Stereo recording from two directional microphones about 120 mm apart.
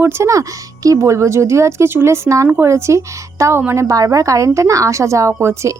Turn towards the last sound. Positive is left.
turn(degrees=-25)  # may be behind; listen again after turning